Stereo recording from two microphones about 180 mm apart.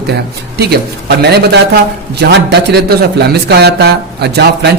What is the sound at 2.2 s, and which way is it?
Speech, 65° right (ahead or behind).